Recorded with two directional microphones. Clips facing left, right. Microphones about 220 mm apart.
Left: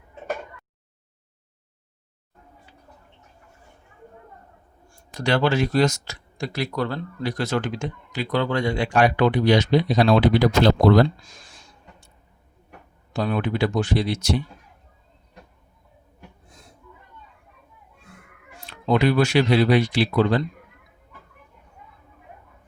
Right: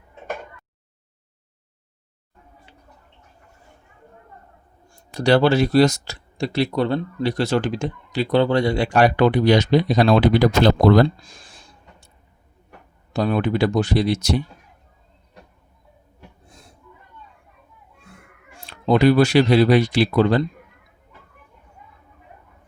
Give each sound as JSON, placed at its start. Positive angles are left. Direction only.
{"t": 4.9, "sound": "speech", "side_deg": -30}
{"t": 11.2, "sound": "a sound", "side_deg": -30}
{"t": 13.1, "sound": "speech", "side_deg": -40}
{"t": 18.5, "sound": "speech", "side_deg": -35}